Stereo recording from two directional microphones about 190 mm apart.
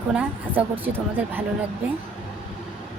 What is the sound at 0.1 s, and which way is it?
A woman's voice, 10° right (ahead or behind).